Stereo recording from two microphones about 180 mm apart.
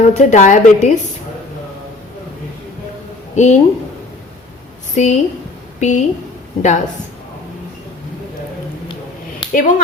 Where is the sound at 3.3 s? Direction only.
40° left (ahead or behind).